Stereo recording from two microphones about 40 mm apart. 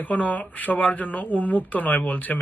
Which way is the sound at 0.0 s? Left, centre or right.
Left.